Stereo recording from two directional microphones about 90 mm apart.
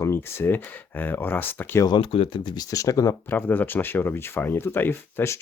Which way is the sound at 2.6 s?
40° left (ahead or behind).